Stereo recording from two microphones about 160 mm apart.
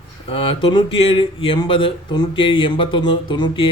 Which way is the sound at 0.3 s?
35° left (ahead or behind).